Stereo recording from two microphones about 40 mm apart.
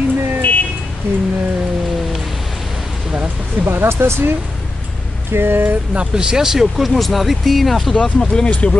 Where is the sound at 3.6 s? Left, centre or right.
Right.